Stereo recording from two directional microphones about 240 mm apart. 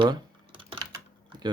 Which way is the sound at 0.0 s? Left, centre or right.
Right.